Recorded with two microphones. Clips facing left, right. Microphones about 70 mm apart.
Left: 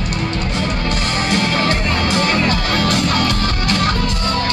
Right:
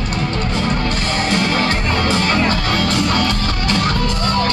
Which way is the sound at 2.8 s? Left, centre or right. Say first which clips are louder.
Left 1 dB; right.